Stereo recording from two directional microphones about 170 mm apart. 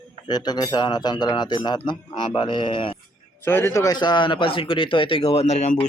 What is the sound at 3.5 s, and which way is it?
A man's voice, 15° left (ahead or behind).